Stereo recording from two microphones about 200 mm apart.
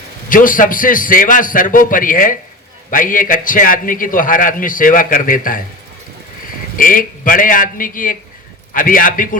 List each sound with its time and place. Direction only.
0.3 s a man's voice: 45° left (ahead or behind)
6.7 s a man's voice: 45° left (ahead or behind)